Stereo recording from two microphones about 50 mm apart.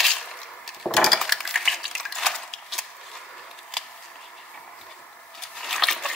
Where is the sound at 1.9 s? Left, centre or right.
Centre.